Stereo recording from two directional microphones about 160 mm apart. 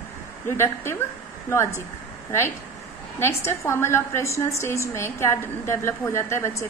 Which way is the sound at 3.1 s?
15° left (ahead or behind).